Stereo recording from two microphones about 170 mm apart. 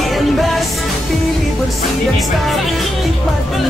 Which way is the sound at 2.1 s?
Centre (ahead or behind).